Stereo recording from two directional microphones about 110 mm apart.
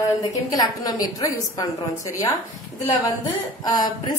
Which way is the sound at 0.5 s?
35° left (ahead or behind).